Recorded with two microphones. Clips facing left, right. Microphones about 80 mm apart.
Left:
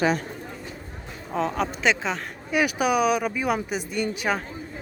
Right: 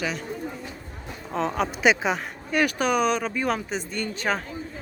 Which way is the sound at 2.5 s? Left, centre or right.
Centre.